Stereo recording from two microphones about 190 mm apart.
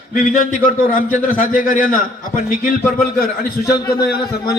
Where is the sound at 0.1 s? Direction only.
45° left (ahead or behind).